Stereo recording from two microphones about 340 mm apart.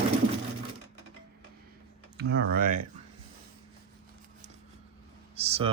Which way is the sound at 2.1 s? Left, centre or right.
Right.